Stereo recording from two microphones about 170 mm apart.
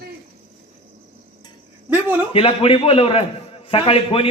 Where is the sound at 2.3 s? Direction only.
35° left (ahead or behind).